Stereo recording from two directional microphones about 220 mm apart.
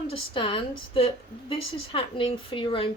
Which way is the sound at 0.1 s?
25° left (ahead or behind).